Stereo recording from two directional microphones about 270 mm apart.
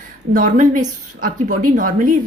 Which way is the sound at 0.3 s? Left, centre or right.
Right.